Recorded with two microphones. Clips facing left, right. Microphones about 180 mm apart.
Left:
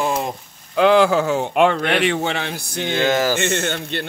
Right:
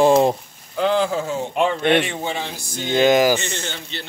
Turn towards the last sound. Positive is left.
turn(degrees=55)  # may be behind; listen again after turning